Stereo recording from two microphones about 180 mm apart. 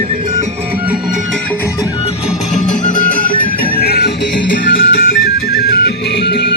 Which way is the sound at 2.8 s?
45° left (ahead or behind).